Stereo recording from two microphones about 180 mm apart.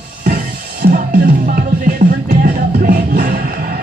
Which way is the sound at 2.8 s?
50° right (ahead or behind).